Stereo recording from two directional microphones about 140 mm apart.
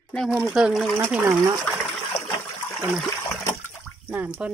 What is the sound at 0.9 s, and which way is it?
Speech, 15° right (ahead or behind).